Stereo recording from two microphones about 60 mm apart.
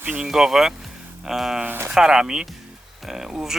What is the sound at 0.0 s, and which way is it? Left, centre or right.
Speech, right.